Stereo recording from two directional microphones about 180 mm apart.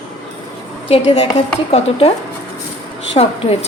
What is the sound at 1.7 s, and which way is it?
Speech, 30° left (ahead or behind).